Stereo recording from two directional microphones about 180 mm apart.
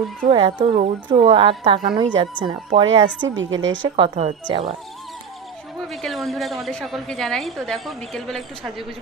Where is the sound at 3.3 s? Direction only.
90° right.